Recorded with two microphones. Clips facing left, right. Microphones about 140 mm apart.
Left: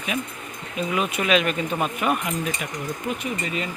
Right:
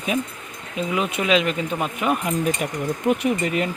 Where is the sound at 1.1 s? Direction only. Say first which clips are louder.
Right 2 dB; 20° right (ahead or behind).